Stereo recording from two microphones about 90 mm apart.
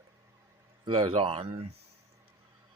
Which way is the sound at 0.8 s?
70° right (ahead or behind).